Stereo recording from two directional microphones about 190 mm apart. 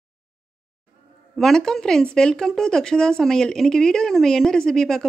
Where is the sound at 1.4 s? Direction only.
5° left (ahead or behind).